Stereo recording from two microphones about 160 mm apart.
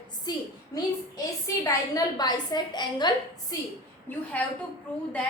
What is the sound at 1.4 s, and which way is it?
A woman's voice, 20° left (ahead or behind).